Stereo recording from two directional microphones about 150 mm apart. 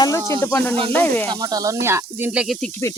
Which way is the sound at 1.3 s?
25° right (ahead or behind).